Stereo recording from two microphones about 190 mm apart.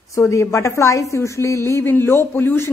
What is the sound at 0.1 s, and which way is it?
A woman's voice, 15° left (ahead or behind).